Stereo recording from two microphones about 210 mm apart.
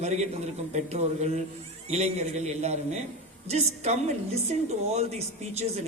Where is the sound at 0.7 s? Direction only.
30° right (ahead or behind).